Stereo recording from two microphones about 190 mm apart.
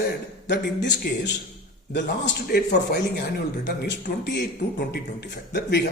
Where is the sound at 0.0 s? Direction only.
65° left (ahead or behind).